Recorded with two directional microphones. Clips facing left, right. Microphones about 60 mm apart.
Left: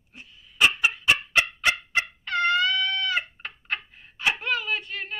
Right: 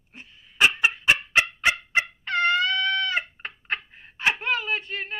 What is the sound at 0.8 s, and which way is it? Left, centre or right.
Fowl, right.